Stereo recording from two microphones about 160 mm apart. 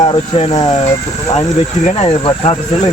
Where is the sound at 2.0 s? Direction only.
35° left (ahead or behind).